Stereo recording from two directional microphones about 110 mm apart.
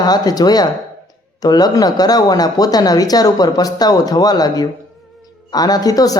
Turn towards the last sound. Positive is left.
turn(degrees=35)  # may be behind; listen again after turning